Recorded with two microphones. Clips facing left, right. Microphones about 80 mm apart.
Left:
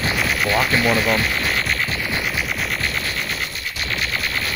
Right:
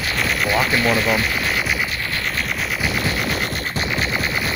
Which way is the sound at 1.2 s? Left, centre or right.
Centre.